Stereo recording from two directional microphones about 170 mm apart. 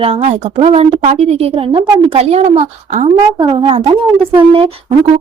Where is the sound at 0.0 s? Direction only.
40° right (ahead or behind).